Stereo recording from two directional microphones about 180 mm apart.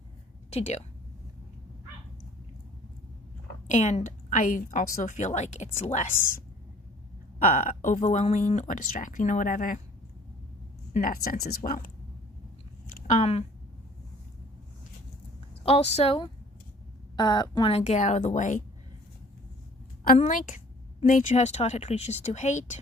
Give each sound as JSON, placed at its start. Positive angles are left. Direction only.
{"t": 0.5, "sound": "speech", "side_deg": 40}
{"t": 3.7, "sound": "a woman's voice", "side_deg": 40}
{"t": 10.9, "sound": "a woman's voice", "side_deg": 55}
{"t": 12.9, "sound": "a sound", "side_deg": 40}
{"t": 15.6, "sound": "speech", "side_deg": 35}
{"t": 17.7, "sound": "speech", "side_deg": 40}
{"t": 20.1, "sound": "a woman's voice", "side_deg": 45}